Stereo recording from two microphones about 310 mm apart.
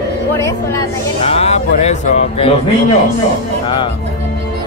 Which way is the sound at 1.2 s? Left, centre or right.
Centre.